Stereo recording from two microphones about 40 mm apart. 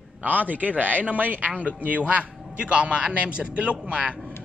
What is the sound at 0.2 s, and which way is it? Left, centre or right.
A man's voice, right.